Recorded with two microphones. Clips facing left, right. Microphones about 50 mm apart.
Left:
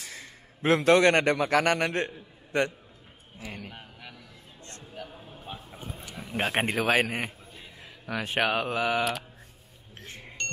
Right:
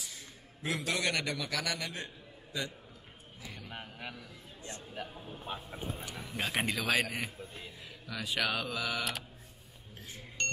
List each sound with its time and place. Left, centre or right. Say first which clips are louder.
0.0 s a man's voice: left 5 dB; left
3.3 s a man's voice: left 8 dB; left
5.5 s speech: right 1 dB; centre
6.2 s a man's voice: left 6 dB; left
9.9 s a sound: left 4 dB; left